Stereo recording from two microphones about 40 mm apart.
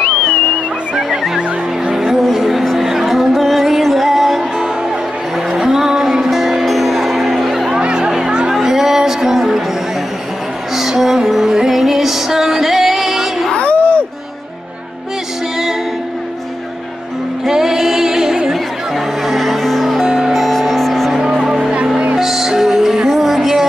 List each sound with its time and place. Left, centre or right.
1.9 s music: centre
5.7 s music: centre
7.8 s music: right; by 9.6 s centre
10.8 s music: centre
13.5 s a sound: left
17.5 s music: centre
18.5 s music: centre
20.1 s music: centre
20.3 s music: centre
21.1 s music: centre